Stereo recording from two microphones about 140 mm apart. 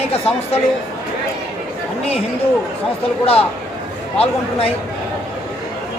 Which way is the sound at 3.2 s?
45° left (ahead or behind).